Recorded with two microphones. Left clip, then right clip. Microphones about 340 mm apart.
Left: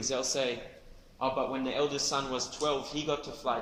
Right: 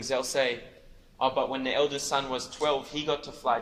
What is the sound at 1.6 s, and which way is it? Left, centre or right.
A man's voice, right.